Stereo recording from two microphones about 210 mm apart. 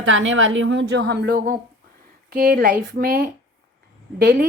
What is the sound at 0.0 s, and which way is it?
A woman's voice, 65° right (ahead or behind).